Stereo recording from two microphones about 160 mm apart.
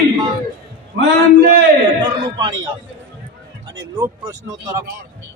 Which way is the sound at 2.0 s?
30° right (ahead or behind).